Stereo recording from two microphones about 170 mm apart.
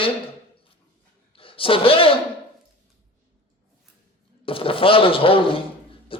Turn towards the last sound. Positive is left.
turn(degrees=30)  # may be behind; listen again after turning